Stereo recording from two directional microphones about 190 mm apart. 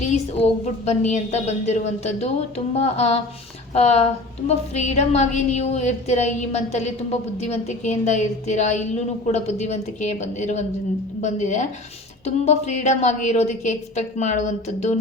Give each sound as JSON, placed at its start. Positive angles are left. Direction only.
{"t": 0.0, "sound": "a woman's voice", "side_deg": 35}